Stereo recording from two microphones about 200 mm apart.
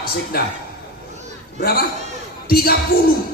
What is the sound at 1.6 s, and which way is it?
Speech, 50° left (ahead or behind).